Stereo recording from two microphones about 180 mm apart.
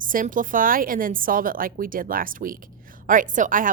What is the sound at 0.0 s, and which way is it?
Speech, 50° right (ahead or behind).